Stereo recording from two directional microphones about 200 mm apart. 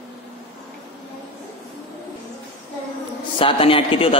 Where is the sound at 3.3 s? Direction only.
25° left (ahead or behind).